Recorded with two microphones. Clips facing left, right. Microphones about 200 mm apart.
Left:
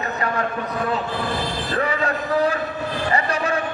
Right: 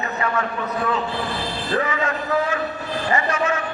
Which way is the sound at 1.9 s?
35° left (ahead or behind).